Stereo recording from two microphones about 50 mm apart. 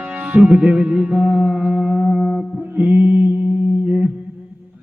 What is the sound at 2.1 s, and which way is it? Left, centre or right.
Mantra, centre.